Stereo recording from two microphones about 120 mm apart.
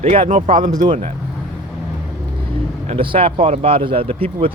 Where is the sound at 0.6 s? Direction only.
40° right (ahead or behind).